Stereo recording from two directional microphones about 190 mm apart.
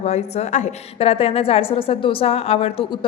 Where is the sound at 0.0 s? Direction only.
35° left (ahead or behind).